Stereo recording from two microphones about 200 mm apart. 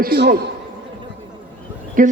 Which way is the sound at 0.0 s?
45° right (ahead or behind).